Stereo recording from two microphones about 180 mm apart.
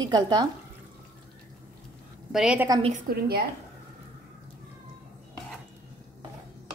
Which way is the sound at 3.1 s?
60° right (ahead or behind).